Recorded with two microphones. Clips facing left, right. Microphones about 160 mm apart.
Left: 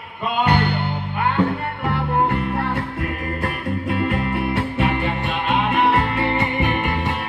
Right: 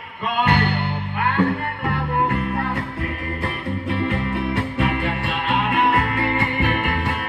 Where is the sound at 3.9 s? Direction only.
40° left (ahead or behind).